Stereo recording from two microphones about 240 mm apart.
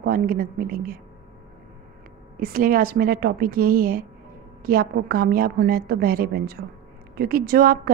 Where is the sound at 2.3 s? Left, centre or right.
Right.